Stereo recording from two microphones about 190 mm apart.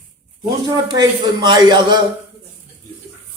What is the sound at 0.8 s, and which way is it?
Speech, 20° right (ahead or behind).